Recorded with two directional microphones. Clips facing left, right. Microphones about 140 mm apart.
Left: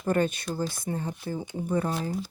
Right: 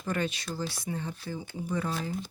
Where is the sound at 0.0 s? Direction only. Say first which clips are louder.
Left 6 dB; 50° left (ahead or behind).